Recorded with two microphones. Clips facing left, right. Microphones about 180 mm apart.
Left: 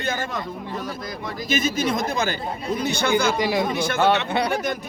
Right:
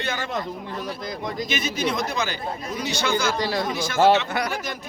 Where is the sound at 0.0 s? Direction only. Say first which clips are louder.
Left 2 dB; 45° left (ahead or behind).